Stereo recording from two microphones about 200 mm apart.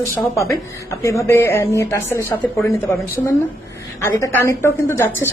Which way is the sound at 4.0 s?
15° left (ahead or behind).